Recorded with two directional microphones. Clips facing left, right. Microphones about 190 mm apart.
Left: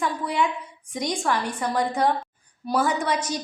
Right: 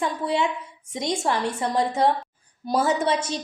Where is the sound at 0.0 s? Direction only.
25° right (ahead or behind).